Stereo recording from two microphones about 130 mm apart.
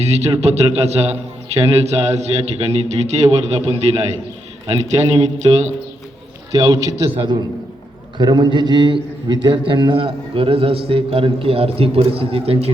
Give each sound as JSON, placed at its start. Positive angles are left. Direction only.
{"t": 0.0, "sound": "a man's voice", "side_deg": -55}
{"t": 6.5, "sound": "a man's voice", "side_deg": -30}
{"t": 7.1, "sound": "a man's voice", "side_deg": -45}